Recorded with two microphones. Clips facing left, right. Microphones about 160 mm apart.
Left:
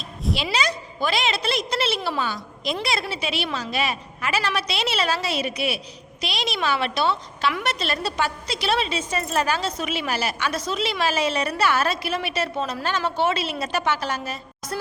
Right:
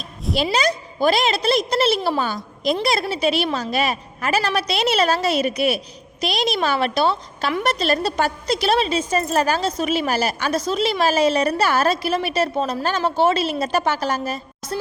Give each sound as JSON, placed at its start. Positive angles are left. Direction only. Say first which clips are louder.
{"t": 0.5, "sound": "a woman's voice", "louder": "right 5 dB", "side_deg": -40}
{"t": 14.7, "sound": "music", "louder": "right 3 dB", "side_deg": -30}